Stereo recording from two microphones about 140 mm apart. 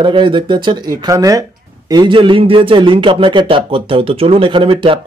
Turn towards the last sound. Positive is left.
turn(degrees=-40)  # may be behind; listen again after turning